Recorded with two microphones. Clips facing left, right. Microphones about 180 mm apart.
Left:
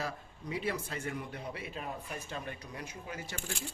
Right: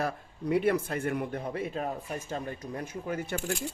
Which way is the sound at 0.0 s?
60° right (ahead or behind).